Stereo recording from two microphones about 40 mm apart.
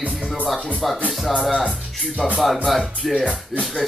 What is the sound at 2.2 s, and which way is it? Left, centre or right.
Speech, centre.